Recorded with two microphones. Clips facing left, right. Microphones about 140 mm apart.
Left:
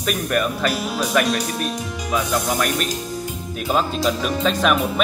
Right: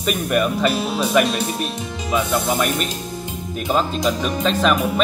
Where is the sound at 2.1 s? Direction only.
Centre (ahead or behind).